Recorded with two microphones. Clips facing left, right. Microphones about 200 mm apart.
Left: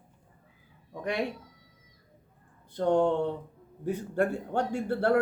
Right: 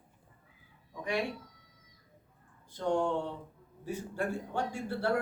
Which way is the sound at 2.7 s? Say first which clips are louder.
Left 6 dB; 55° left (ahead or behind).